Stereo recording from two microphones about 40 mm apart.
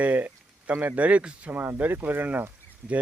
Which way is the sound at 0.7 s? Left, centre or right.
Right.